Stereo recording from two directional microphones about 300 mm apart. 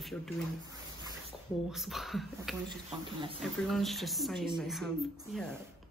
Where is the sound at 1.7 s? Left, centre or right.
Centre.